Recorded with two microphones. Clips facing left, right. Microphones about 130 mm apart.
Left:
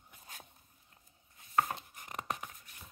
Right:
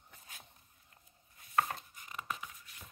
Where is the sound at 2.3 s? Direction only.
50° left (ahead or behind).